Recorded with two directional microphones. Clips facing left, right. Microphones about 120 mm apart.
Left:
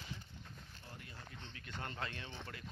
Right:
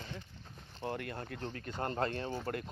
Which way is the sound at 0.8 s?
75° right (ahead or behind).